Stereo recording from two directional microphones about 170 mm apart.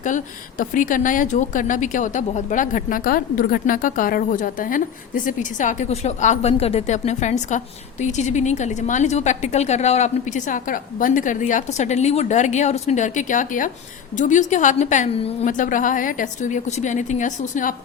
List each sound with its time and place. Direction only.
0.6 s a woman's voice: 50° left (ahead or behind); by 15.4 s 35° left (ahead or behind)
15.4 s a woman's voice: 50° left (ahead or behind)